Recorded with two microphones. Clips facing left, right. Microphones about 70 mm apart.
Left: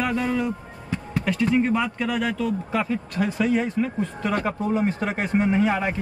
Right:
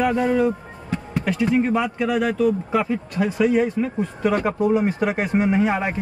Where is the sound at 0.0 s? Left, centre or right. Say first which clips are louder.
Right 5 dB; centre.